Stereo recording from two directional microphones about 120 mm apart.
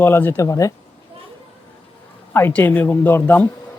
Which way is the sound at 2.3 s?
15° left (ahead or behind).